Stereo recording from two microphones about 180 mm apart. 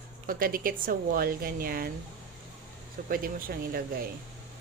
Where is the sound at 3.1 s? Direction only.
50° right (ahead or behind).